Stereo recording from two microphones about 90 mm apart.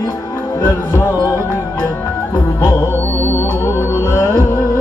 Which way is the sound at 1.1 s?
45° left (ahead or behind).